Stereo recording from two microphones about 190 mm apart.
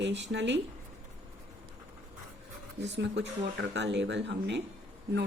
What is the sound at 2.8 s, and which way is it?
Speech, 65° right (ahead or behind).